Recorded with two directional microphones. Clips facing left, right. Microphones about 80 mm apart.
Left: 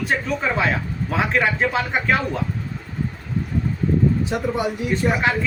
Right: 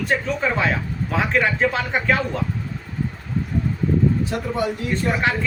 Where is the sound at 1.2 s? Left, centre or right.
Centre.